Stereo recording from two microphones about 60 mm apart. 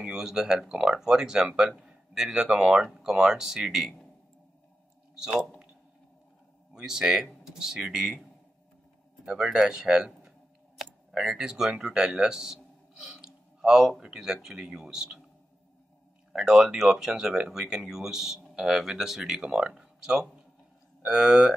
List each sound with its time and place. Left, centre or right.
0.0 s speech: centre
1.8 s a sound: centre
2.2 s speech: centre
6.7 s speech: centre
9.2 s speech: centre
10.8 s a sound: centre
11.8 s speech: centre
16.3 s speech: centre